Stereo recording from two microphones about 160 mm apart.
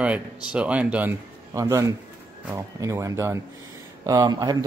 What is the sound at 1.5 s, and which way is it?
Speech, 20° right (ahead or behind).